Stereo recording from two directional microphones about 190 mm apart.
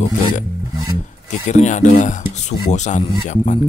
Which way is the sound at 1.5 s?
40° left (ahead or behind).